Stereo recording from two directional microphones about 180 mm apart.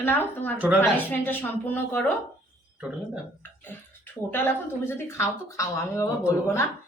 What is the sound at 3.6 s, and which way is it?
Speech, 10° left (ahead or behind).